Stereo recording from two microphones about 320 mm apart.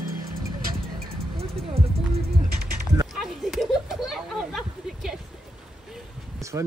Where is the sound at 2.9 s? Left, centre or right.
Centre.